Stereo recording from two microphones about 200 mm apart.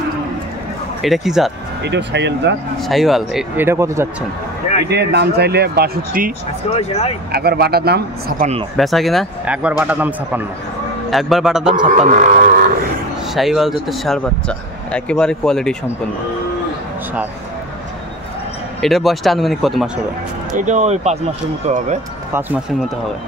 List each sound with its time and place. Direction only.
1.0 s speech: centre (ahead or behind)
1.8 s speech: 60° right (ahead or behind)
2.8 s speech: centre (ahead or behind)
4.8 s speech: 55° right (ahead or behind)
6.7 s speech: 30° left (ahead or behind)
7.3 s speech: 50° right (ahead or behind)
8.7 s speech: centre (ahead or behind)
11.8 s speech: 40° right (ahead or behind)
13.3 s speech: centre (ahead or behind)
18.8 s speech: centre (ahead or behind)
20.5 s speech: 35° right (ahead or behind)